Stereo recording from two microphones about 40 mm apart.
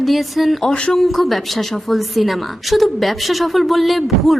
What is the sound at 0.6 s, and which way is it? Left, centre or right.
Speech, left.